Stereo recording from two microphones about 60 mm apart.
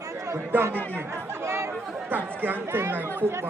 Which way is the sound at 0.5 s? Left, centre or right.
Right.